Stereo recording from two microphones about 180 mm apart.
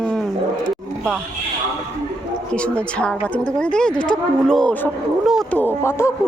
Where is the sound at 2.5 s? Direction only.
5° left (ahead or behind).